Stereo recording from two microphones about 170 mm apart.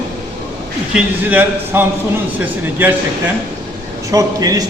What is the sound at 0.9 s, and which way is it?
Speech, 10° right (ahead or behind).